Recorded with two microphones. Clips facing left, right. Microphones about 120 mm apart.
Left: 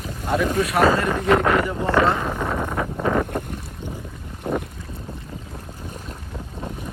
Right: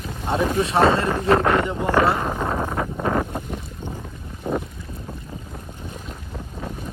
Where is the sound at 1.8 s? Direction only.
10° right (ahead or behind).